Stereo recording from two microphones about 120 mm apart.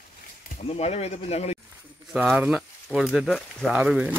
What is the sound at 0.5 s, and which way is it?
Speech, 60° left (ahead or behind).